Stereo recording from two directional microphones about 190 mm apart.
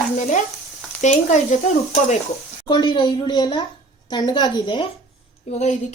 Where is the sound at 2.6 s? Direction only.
25° left (ahead or behind).